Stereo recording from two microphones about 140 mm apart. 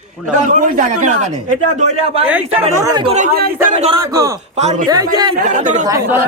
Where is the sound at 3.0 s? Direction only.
50° right (ahead or behind).